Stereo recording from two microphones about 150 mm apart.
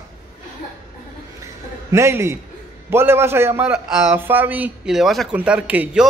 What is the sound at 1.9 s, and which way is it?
A man's voice, 20° right (ahead or behind).